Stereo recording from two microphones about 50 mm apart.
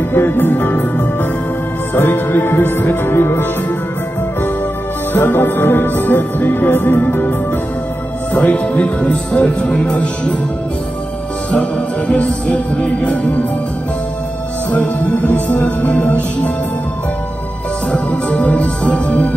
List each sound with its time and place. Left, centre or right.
0.1 s music: left
5.1 s music: left
8.3 s speech: left
12.1 s speech: left
14.7 s music: left
18.3 s speech: left